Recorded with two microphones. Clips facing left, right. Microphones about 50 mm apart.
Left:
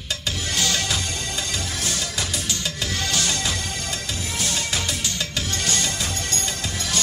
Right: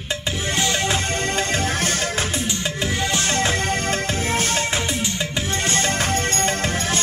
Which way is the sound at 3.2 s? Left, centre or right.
Right.